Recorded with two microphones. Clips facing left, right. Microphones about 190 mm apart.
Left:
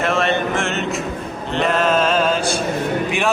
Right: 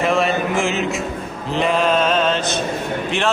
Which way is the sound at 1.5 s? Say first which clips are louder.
Even; centre (ahead or behind).